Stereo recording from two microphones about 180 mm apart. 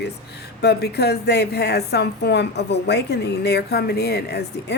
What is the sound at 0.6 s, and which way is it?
A woman's voice, 65° left (ahead or behind).